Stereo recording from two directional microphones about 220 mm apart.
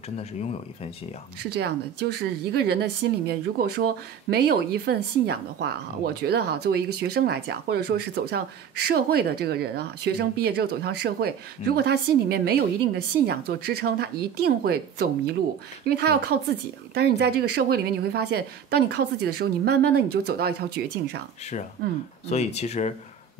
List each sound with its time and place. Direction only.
2.5 s speech: 50° right (ahead or behind)
22.3 s speech: 30° left (ahead or behind)